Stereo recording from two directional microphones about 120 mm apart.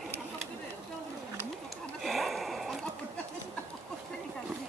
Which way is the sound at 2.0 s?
Centre (ahead or behind).